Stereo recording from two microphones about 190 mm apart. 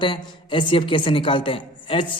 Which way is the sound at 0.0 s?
25° left (ahead or behind).